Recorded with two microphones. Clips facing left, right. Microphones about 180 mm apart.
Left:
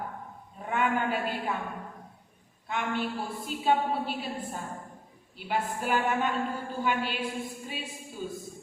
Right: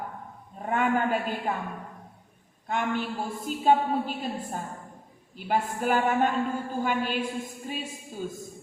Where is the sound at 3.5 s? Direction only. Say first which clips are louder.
Right 4 dB; 45° right (ahead or behind).